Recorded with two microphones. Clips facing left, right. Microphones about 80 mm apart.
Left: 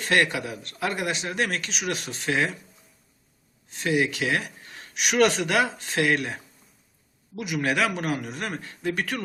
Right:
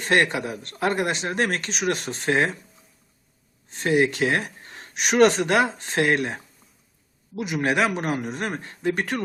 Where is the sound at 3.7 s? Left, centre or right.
Right.